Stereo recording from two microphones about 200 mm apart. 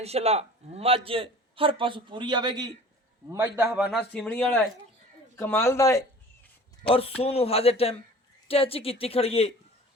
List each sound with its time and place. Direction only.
0.0 s a man's voice: 30° right (ahead or behind); by 4.0 s 5° right (ahead or behind)
4.1 s a man's voice: 10° left (ahead or behind)
6.8 s speech: 25° left (ahead or behind)